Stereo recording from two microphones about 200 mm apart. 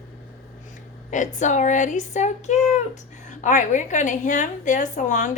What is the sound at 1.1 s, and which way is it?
A woman's voice, 40° left (ahead or behind).